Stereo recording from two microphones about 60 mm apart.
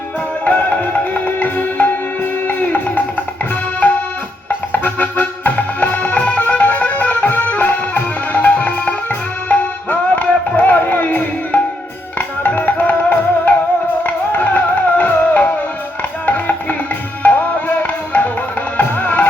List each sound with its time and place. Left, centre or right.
0.4 s music: left
4.4 s music: left
18.8 s music: left